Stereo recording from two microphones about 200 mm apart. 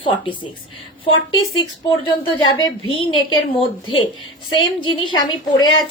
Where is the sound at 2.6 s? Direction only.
20° left (ahead or behind).